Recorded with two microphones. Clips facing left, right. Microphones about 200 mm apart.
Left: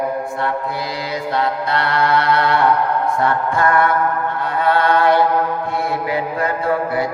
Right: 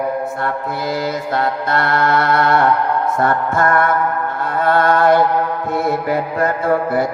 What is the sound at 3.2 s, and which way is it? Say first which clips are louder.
A capella: right 2 dB; 50° right (ahead or behind).